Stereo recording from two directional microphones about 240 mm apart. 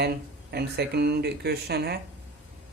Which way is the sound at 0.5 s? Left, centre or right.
Right.